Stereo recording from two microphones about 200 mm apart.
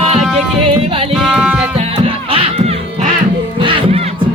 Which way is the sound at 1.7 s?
25° right (ahead or behind).